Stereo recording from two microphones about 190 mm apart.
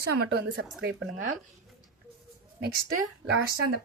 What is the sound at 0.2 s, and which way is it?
Speech, 55° right (ahead or behind).